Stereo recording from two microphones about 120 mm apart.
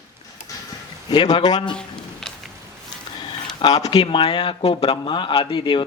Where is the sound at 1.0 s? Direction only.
40° left (ahead or behind).